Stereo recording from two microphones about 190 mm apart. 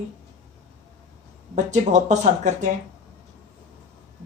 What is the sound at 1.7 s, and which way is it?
Speech, 40° right (ahead or behind).